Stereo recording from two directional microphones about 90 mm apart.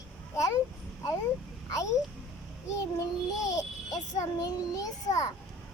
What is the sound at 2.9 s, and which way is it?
A child's voice, 40° left (ahead or behind).